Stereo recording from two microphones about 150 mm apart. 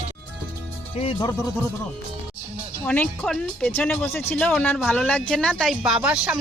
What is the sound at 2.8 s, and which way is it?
A woman's voice, 10° left (ahead or behind).